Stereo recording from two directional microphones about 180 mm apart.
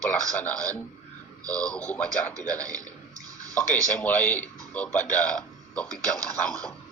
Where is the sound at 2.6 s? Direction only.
20° right (ahead or behind).